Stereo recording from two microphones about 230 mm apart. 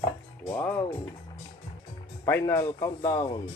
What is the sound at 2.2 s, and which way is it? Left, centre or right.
Speech, centre.